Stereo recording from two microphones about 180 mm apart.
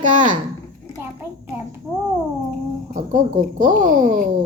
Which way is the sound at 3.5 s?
45° right (ahead or behind).